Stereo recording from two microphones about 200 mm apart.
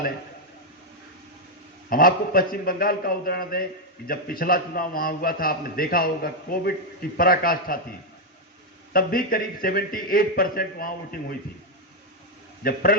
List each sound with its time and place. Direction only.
1.9 s a man's voice: 45° left (ahead or behind)
8.9 s a man's voice: 45° left (ahead or behind)
12.6 s a man's voice: 50° left (ahead or behind)